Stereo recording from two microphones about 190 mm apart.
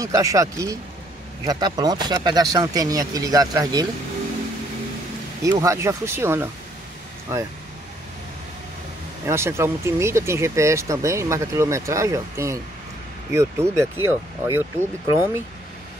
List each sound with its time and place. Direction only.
0.0 s speech: 15° right (ahead or behind)
5.4 s speech: 15° right (ahead or behind)
9.2 s speech: 15° right (ahead or behind)